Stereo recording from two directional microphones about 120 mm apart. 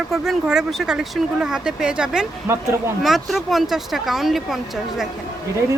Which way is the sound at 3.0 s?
Centre (ahead or behind).